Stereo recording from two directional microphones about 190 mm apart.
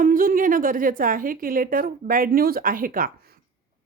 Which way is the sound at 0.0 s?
45° right (ahead or behind).